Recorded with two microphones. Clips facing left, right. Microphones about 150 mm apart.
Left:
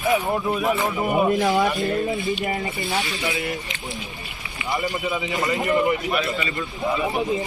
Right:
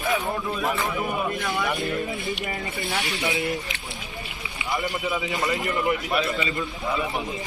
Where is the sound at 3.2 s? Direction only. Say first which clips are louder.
Even; 25° right (ahead or behind).